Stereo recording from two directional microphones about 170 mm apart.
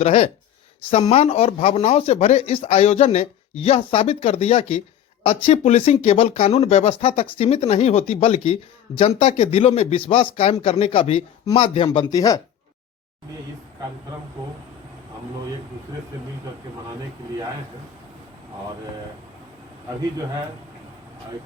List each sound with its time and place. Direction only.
0.0 s speech: 40° left (ahead or behind)
11.9 s speech: 20° left (ahead or behind)